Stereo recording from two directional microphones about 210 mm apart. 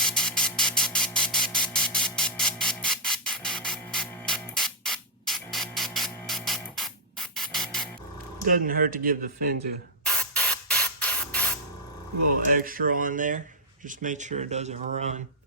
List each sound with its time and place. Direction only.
0.0 s a sound: 5° left (ahead or behind)
8.4 s speech: 40° right (ahead or behind)
10.1 s spray: 5° left (ahead or behind)
12.5 s speech: 40° right (ahead or behind)